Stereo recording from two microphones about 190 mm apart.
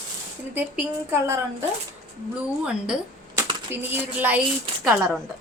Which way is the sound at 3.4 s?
25° right (ahead or behind).